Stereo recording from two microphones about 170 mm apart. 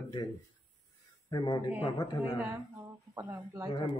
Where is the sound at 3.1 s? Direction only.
25° right (ahead or behind).